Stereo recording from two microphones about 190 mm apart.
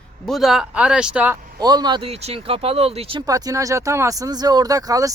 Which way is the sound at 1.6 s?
20° right (ahead or behind).